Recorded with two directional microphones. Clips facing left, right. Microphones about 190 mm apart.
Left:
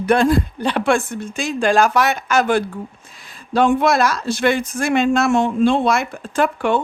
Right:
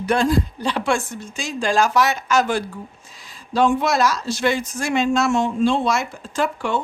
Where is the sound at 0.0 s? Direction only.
55° left (ahead or behind).